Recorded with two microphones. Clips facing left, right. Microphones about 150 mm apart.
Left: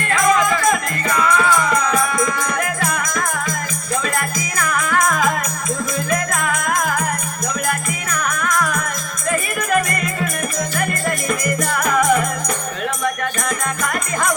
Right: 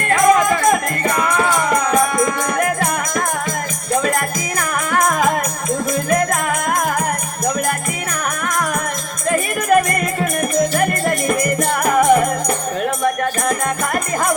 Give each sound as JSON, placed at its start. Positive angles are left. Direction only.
{"t": 0.1, "sound": "music", "side_deg": -50}
{"t": 4.6, "sound": "music", "side_deg": -45}
{"t": 6.1, "sound": "music", "side_deg": -50}
{"t": 9.3, "sound": "music", "side_deg": -50}
{"t": 11.7, "sound": "music", "side_deg": -30}